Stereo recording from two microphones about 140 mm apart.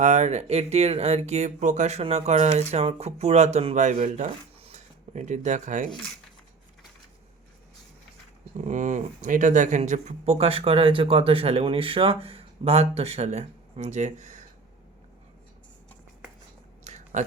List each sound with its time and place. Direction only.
0.0 s speech: 55° right (ahead or behind)
8.5 s speech: 60° right (ahead or behind)
16.8 s a sound: 55° right (ahead or behind)